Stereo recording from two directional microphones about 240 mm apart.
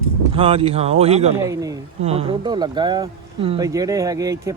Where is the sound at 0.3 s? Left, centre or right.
Right.